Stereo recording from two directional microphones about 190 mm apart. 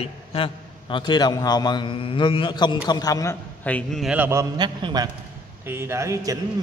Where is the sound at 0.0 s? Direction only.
30° left (ahead or behind).